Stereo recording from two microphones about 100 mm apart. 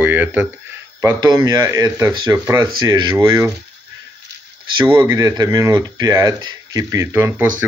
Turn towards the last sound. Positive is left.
turn(degrees=-20)  # may be behind; listen again after turning